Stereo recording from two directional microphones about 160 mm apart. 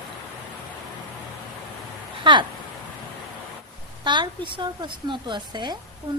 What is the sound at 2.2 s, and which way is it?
Speech, 30° right (ahead or behind).